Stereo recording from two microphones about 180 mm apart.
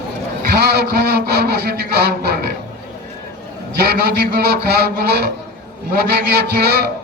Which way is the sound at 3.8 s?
60° right (ahead or behind).